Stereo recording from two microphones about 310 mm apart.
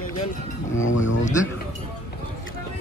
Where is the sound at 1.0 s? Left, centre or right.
Left.